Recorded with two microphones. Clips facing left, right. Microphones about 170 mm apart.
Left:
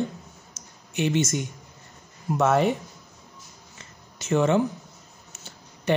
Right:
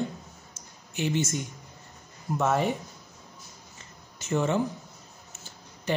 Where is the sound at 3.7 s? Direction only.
80° left.